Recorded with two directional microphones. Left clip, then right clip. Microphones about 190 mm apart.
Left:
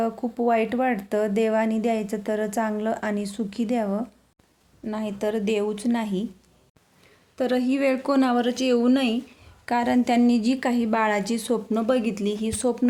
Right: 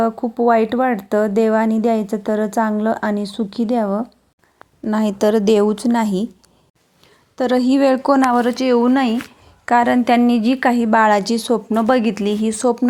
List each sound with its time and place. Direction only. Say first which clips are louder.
0.0 s speech: right 8 dB; 25° right (ahead or behind)
4.9 s a woman's voice: right 11 dB; 40° right (ahead or behind)
7.3 s a woman's voice: right 8 dB; 25° right (ahead or behind)